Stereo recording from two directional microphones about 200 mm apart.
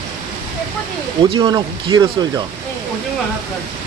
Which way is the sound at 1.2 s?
25° right (ahead or behind).